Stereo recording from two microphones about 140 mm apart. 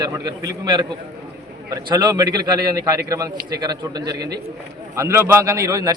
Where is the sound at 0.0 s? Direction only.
25° right (ahead or behind).